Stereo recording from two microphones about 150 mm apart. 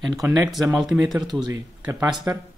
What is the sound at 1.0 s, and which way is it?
Speech, 25° right (ahead or behind).